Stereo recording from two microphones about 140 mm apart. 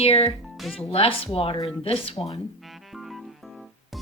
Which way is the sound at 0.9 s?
40° left (ahead or behind).